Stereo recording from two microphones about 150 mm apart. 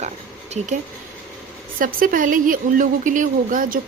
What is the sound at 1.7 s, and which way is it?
A woman's voice, 65° right (ahead or behind).